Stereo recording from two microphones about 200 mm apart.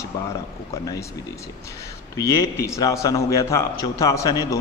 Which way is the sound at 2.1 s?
15° left (ahead or behind).